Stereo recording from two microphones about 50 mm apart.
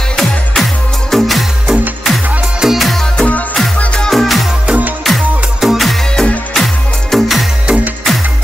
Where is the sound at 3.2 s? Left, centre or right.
Left.